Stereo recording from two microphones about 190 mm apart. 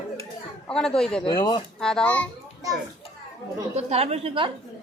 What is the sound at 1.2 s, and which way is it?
Speech, 25° left (ahead or behind).